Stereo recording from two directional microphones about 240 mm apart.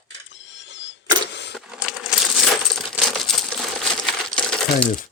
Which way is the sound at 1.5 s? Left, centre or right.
Centre.